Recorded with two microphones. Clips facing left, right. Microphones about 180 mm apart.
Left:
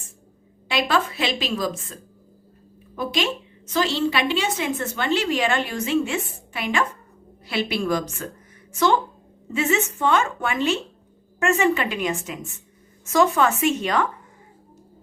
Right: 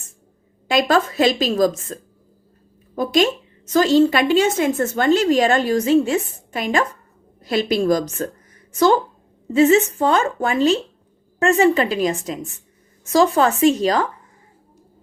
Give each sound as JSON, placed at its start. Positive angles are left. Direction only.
{"t": 0.7, "sound": "a woman's voice", "side_deg": -45}